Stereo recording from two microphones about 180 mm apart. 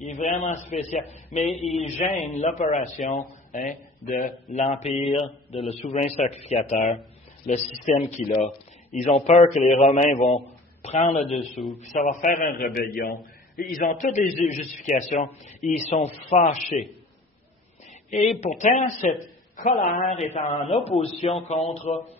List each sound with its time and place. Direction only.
0.1 s a man's voice: 45° left (ahead or behind)
1.5 s a man's voice: centre (ahead or behind)
1.8 s a man's voice: 40° left (ahead or behind)
18.4 s a man's voice: 40° left (ahead or behind)